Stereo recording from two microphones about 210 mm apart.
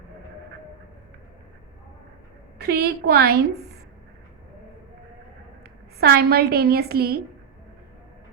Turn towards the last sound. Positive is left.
turn(degrees=-50)  # may be behind; listen again after turning